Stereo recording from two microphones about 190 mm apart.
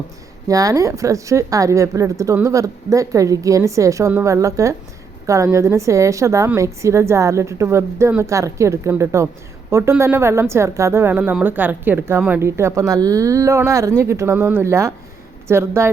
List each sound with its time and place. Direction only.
0.4 s a woman's voice: 20° right (ahead or behind)